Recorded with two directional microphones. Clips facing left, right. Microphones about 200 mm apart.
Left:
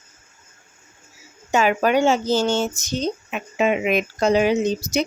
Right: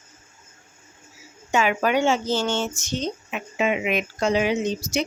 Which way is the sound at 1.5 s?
40° left (ahead or behind).